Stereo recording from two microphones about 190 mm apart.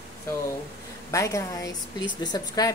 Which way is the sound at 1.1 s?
15° left (ahead or behind).